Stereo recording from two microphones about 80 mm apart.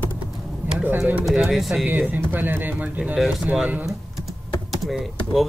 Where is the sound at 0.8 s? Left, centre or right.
Right.